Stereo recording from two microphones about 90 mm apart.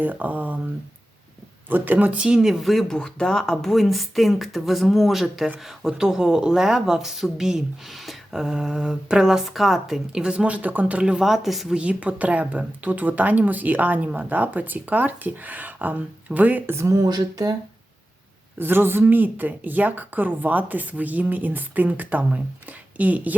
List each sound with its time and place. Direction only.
0.0 s a woman's voice: 20° right (ahead or behind)
1.7 s speech: 20° right (ahead or behind)
16.9 s speech: 45° right (ahead or behind)
18.6 s a woman's voice: 25° right (ahead or behind)